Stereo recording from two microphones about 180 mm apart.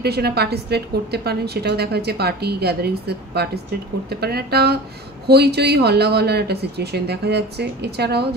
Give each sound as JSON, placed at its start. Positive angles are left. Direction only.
{"t": 0.0, "sound": "a woman's voice", "side_deg": -65}